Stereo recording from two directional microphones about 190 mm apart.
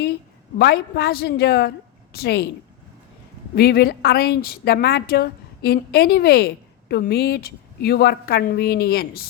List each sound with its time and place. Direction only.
0.6 s a woman's voice: 55° left (ahead or behind)
3.5 s a woman's voice: 55° left (ahead or behind)